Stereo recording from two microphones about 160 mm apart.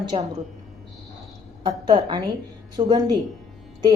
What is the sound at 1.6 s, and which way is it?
A woman's voice, 30° right (ahead or behind).